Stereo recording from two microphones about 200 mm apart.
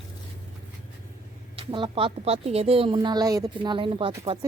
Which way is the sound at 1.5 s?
25° right (ahead or behind).